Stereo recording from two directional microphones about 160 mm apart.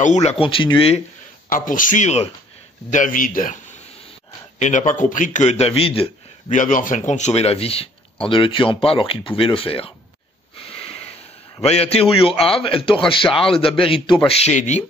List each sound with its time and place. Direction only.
0.0 s a man's voice: 45° left (ahead or behind)
1.5 s a man's voice: 55° left (ahead or behind)
4.6 s a man's voice: 50° left (ahead or behind)
6.5 s a man's voice: 55° left (ahead or behind); by 9.9 s 35° left (ahead or behind)
10.7 s wheeze: 35° left (ahead or behind)
11.6 s a man's voice: 40° left (ahead or behind)